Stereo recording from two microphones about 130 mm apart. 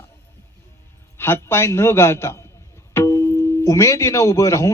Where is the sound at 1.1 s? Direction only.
20° left (ahead or behind).